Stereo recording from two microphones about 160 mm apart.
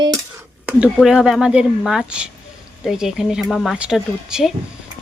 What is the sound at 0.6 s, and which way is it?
Speech, 5° right (ahead or behind).